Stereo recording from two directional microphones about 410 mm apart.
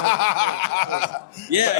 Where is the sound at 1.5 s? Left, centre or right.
Right.